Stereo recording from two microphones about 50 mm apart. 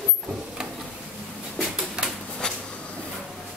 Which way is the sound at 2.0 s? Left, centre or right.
Centre.